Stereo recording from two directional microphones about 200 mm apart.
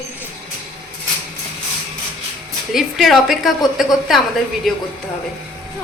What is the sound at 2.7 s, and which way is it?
A woman's voice, centre (ahead or behind).